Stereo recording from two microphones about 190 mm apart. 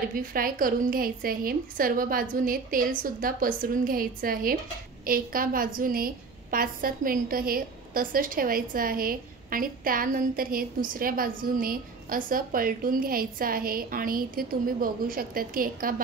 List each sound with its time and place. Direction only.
0.1 s a woman's voice: 45° right (ahead or behind)